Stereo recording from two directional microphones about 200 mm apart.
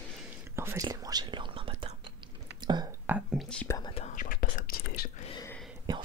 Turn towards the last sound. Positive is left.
turn(degrees=-20)  # may be behind; listen again after turning